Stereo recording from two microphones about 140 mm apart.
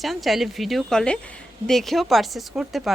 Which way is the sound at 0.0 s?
Centre (ahead or behind).